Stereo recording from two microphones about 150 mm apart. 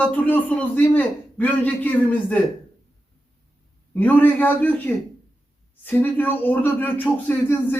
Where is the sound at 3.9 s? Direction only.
10° left (ahead or behind).